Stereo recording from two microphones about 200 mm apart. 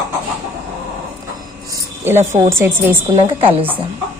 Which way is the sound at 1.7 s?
10° right (ahead or behind).